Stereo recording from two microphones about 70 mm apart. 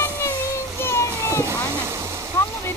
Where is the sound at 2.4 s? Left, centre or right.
Left.